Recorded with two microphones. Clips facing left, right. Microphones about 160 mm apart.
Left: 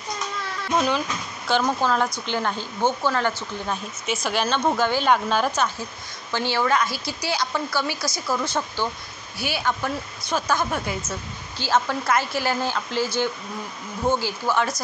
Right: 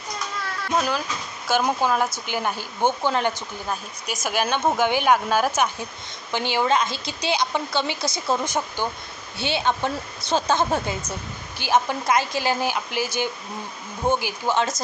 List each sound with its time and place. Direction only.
0.7 s a woman's voice: 5° right (ahead or behind); by 11.0 s 25° right (ahead or behind)
11.0 s a woman's voice: 15° right (ahead or behind)